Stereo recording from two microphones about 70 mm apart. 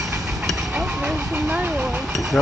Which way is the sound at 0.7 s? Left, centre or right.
Centre.